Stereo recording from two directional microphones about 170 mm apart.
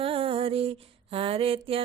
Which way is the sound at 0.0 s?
35° right (ahead or behind).